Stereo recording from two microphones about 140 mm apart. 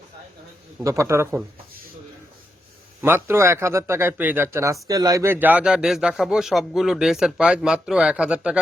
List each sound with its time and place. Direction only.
0.9 s a man's voice: 20° right (ahead or behind)
3.0 s speech: 15° right (ahead or behind)